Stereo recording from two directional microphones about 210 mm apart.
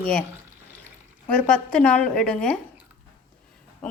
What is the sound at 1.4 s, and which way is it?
A woman's voice, 5° left (ahead or behind).